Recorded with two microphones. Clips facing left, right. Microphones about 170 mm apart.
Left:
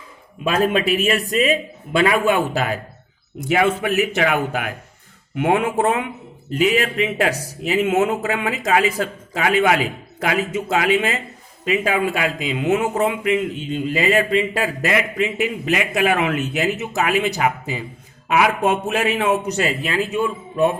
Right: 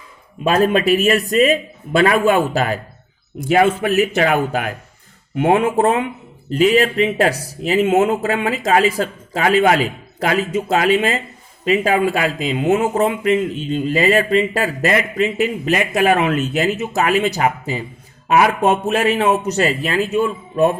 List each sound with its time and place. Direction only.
0.4 s speech: 40° right (ahead or behind)